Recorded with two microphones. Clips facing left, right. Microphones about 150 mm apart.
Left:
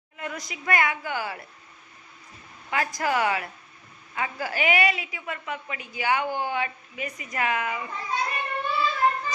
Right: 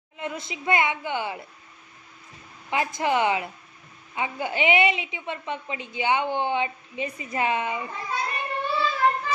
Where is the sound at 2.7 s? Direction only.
20° right (ahead or behind).